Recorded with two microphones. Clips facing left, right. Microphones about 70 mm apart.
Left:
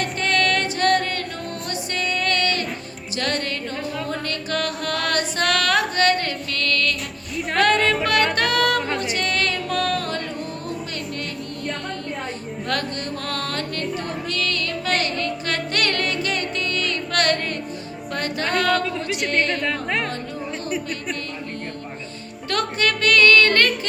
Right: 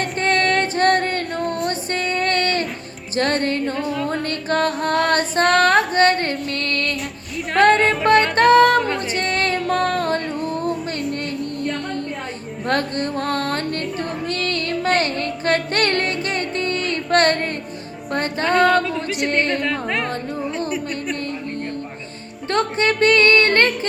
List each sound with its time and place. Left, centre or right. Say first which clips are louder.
0.0 s music: right 2 dB; right
4.9 s female singing: right 5 dB; right
7.6 s music: right 4 dB; right
12.6 s music: right 6 dB; right
19.3 s a woman's voice: right 2 dB; right
19.6 s speech: right 2 dB; centre
20.7 s a sound: right 2 dB; centre
22.4 s music: right 4 dB; right